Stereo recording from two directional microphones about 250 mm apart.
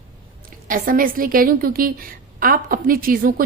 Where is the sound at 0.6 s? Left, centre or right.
Right.